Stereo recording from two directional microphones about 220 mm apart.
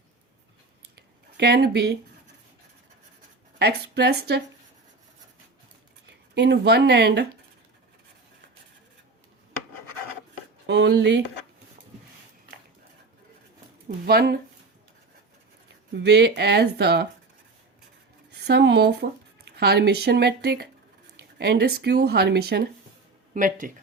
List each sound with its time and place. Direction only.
1.4 s speech: 45° right (ahead or behind)
3.6 s speech: 45° right (ahead or behind)
6.3 s speech: 50° right (ahead or behind)
10.7 s speech: 50° right (ahead or behind)
13.8 s speech: 45° right (ahead or behind)
16.0 s speech: 50° right (ahead or behind)
18.3 s speech: 50° right (ahead or behind)